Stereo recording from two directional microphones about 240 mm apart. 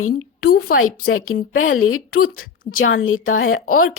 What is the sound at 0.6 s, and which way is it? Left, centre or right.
Speech, left.